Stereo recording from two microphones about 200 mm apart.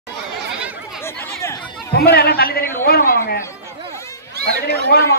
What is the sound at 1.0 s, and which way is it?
Chatter, 15° left (ahead or behind).